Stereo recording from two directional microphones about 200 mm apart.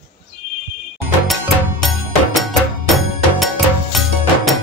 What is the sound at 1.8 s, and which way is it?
Music, centre (ahead or behind).